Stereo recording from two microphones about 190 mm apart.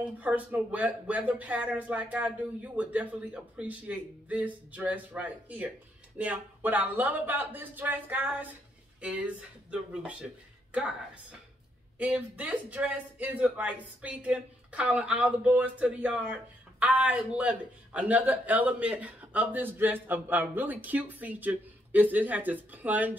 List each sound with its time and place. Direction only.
0.2 s a man's voice: 10° right (ahead or behind)
12.0 s a man's voice: 5° right (ahead or behind)